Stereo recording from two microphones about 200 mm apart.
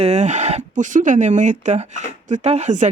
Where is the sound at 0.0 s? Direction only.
35° right (ahead or behind).